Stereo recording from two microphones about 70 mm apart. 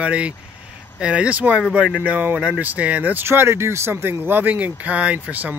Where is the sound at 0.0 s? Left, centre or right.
Centre.